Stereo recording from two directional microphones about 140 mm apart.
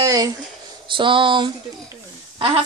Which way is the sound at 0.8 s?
35° right (ahead or behind).